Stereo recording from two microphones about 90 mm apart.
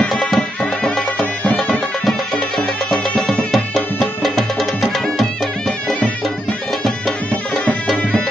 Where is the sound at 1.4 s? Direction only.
15° left (ahead or behind).